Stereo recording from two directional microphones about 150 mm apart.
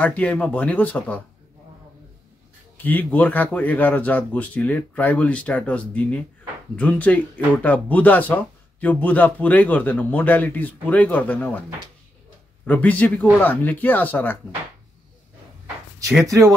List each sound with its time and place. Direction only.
0.0 s speech: 10° left (ahead or behind)
2.8 s speech: 10° left (ahead or behind)
12.6 s speech: 10° left (ahead or behind)
16.3 s speech: 20° right (ahead or behind)